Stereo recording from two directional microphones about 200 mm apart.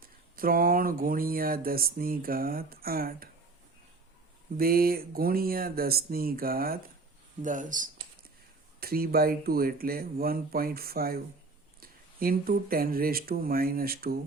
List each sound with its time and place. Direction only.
0.0 s speech: 45° right (ahead or behind)
4.5 s speech: 45° right (ahead or behind)